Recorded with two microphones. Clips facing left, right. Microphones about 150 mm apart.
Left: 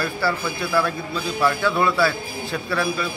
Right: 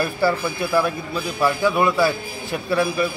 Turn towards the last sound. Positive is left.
turn(degrees=-15)  # may be behind; listen again after turning